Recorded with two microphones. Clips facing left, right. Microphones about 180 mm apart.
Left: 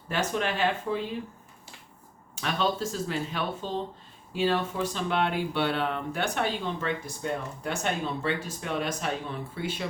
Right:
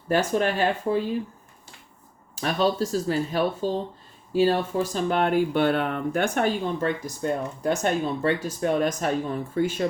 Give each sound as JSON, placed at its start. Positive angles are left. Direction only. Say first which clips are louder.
{"t": 0.1, "sound": "speech", "louder": "right 6 dB", "side_deg": -40}
{"t": 2.3, "sound": "speech", "louder": "right 5 dB", "side_deg": -40}